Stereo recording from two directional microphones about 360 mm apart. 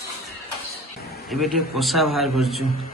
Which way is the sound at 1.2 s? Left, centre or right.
Centre.